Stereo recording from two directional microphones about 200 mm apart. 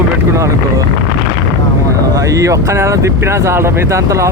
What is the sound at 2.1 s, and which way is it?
Speech, 15° right (ahead or behind).